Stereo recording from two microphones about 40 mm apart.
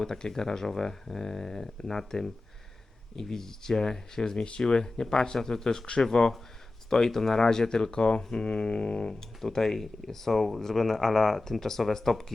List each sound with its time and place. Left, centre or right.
0.0 s speech: centre